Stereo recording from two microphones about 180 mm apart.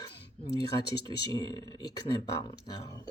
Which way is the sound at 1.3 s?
20° left (ahead or behind).